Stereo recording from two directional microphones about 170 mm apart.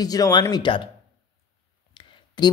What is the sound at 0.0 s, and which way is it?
Speech, 20° left (ahead or behind).